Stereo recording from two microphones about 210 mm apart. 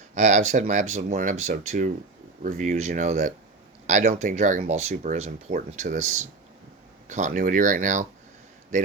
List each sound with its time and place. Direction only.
0.1 s speech: 35° right (ahead or behind)